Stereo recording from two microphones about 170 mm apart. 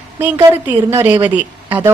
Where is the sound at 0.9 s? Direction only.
15° right (ahead or behind).